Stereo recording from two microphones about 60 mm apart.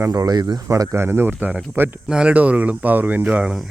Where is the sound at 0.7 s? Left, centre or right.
Right.